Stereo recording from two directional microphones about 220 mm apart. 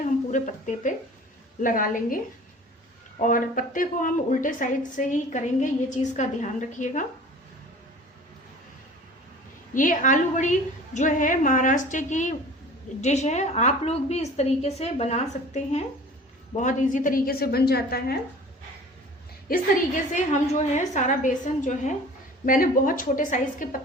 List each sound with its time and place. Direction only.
0.3 s a woman's voice: 35° left (ahead or behind)
9.7 s a woman's voice: 35° left (ahead or behind)
19.5 s a woman's voice: 35° left (ahead or behind)